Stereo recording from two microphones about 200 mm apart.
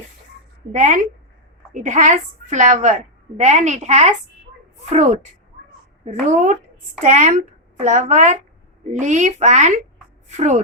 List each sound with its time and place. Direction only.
0.7 s a woman's voice: 40° right (ahead or behind)
6.2 s a woman's voice: 35° right (ahead or behind)